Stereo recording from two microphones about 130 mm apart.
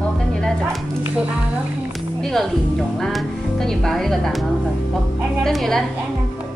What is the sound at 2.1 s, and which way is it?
Music, 5° left (ahead or behind).